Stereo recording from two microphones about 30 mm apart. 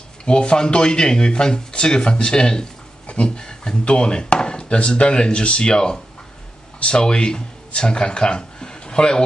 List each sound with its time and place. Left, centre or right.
0.2 s speech: left
3.1 s a sound: left
3.3 s speech: left